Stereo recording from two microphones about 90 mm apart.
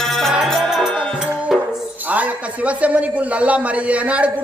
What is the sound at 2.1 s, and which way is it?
A man's voice, 15° right (ahead or behind).